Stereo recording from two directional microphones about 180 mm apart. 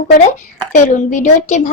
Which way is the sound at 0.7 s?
45° left (ahead or behind).